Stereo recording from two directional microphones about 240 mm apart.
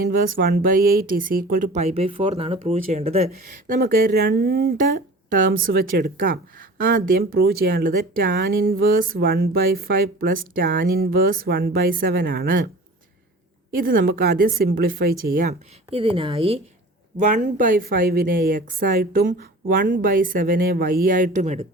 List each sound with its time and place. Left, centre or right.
0.0 s speech: right
3.8 s speech: right
13.7 s speech: right
15.9 s speech: right